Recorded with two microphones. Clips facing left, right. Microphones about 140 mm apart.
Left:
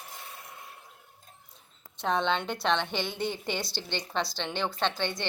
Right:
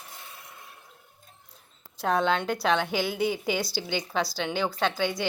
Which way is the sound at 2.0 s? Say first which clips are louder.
Right 3 dB; 5° right (ahead or behind).